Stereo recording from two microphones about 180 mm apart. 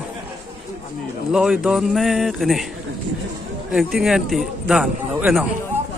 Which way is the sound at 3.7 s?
Centre (ahead or behind).